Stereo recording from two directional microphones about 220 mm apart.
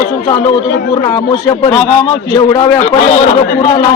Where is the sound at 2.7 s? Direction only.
30° left (ahead or behind).